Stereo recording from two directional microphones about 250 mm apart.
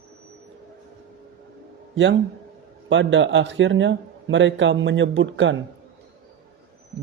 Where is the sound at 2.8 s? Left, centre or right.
Right.